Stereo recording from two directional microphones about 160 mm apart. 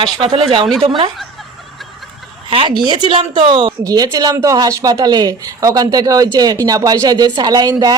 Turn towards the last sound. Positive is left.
turn(degrees=-25)  # may be behind; listen again after turning